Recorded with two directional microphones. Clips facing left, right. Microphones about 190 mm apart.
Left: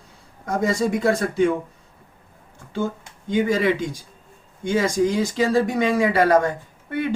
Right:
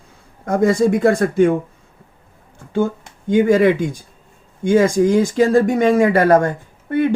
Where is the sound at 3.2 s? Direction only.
50° right (ahead or behind).